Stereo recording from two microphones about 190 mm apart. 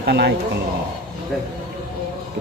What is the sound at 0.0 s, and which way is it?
Speech, 60° right (ahead or behind).